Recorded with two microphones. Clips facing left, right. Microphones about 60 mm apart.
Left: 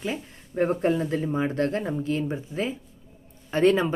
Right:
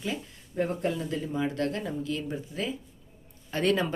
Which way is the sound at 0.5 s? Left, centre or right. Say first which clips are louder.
Left 6 dB; left.